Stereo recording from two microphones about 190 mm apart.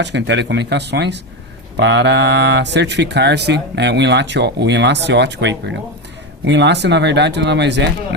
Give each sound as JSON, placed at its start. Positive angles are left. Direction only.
{"t": 0.0, "sound": "speech", "side_deg": -65}